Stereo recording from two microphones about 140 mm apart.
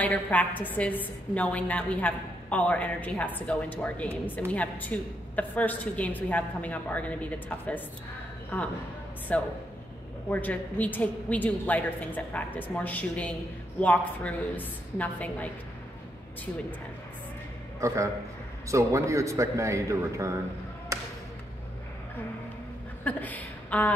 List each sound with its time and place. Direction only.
0.0 s a woman's voice: 10° left (ahead or behind)
17.7 s a man's voice: 20° right (ahead or behind)
20.9 s music: 25° right (ahead or behind)
23.0 s a woman's voice: 10° left (ahead or behind)